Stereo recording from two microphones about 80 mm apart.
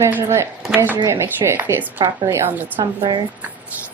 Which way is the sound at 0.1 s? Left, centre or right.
Right.